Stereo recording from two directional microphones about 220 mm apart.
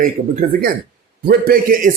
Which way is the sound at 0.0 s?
40° right (ahead or behind).